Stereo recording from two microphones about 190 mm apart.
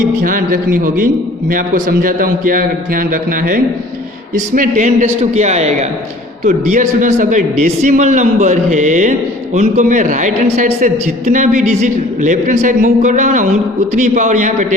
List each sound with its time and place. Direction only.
0.2 s a man's voice: 50° right (ahead or behind)